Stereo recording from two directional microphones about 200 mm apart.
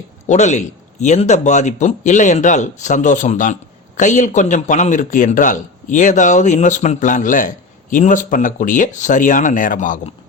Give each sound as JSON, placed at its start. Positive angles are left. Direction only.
{"t": 0.3, "sound": "speech", "side_deg": 35}